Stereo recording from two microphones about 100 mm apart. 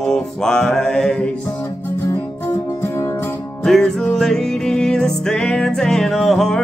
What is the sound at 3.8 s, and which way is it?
Music, 15° left (ahead or behind).